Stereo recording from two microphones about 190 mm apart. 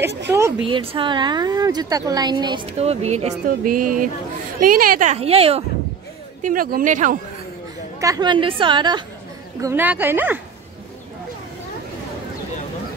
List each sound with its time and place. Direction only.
0.7 s a woman's voice: 25° right (ahead or behind)
6.4 s a woman's voice: 50° right (ahead or behind)
8.0 s a woman's voice: 20° right (ahead or behind)
9.6 s speech: 15° right (ahead or behind)